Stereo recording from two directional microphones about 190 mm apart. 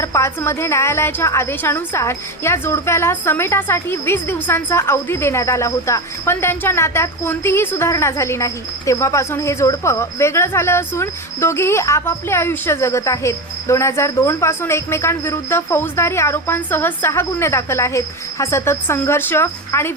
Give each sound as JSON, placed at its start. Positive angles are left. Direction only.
{"t": 0.0, "sound": "a woman's voice", "side_deg": 15}